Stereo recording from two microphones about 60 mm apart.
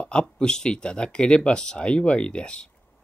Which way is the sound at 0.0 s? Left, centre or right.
Centre.